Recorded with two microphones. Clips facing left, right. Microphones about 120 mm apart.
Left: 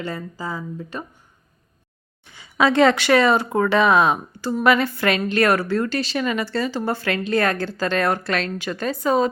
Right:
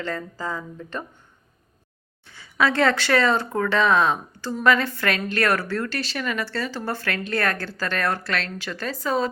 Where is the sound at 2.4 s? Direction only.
20° left (ahead or behind).